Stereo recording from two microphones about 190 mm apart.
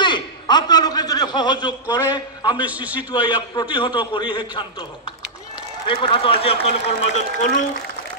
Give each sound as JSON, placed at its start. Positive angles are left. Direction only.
{"t": 0.0, "sound": "a sound", "side_deg": 25}
{"t": 2.6, "sound": "a man's voice", "side_deg": -10}
{"t": 3.1, "sound": "a man's voice", "side_deg": 25}
{"t": 5.9, "sound": "a man's voice", "side_deg": 25}
{"t": 7.2, "sound": "a woman's voice", "side_deg": 40}